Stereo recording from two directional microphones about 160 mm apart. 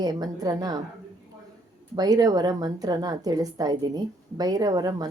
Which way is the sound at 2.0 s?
25° right (ahead or behind).